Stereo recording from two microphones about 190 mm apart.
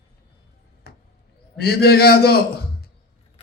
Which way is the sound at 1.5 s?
55° left (ahead or behind).